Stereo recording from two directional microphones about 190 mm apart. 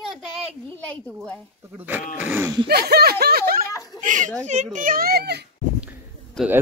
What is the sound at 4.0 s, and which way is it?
A child's voice, 40° right (ahead or behind).